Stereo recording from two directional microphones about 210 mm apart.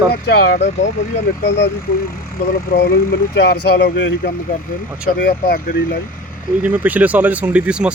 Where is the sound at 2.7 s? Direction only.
45° left (ahead or behind).